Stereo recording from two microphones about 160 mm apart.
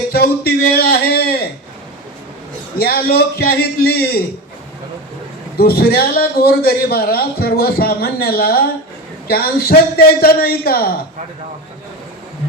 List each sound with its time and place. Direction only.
0.1 s a sound: 75° left (ahead or behind)
2.7 s a man's voice: 75° left (ahead or behind)
5.5 s a man's voice: 75° left (ahead or behind)